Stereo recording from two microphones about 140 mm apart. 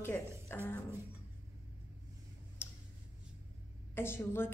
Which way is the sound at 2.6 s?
15° left (ahead or behind).